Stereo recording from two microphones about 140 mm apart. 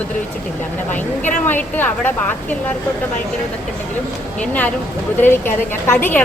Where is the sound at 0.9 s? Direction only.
10° left (ahead or behind).